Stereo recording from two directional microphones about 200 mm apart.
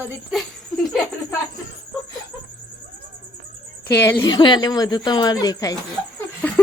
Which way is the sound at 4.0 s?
15° left (ahead or behind).